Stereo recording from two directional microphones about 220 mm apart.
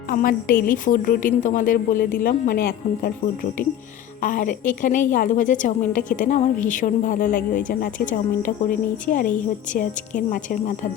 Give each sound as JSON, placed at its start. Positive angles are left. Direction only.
{"t": 0.1, "sound": "a woman's voice", "side_deg": 40}
{"t": 4.2, "sound": "a woman's voice", "side_deg": 35}